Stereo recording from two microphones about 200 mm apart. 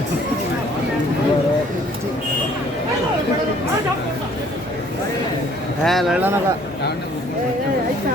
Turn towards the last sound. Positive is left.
turn(degrees=-5)  # may be behind; listen again after turning